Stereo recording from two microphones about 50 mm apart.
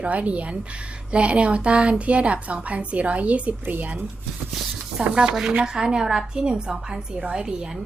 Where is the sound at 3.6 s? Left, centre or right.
Right.